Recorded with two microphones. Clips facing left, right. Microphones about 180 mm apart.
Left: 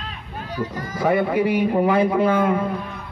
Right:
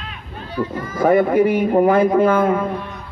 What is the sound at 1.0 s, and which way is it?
Speech, 45° right (ahead or behind).